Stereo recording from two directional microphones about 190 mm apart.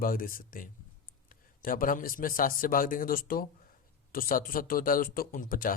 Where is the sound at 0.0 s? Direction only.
50° left (ahead or behind).